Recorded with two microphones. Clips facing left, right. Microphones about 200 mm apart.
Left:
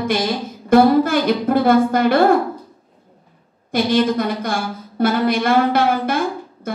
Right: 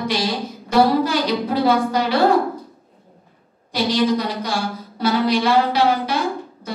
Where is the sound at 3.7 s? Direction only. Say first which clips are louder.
Left 2 dB; 55° left (ahead or behind).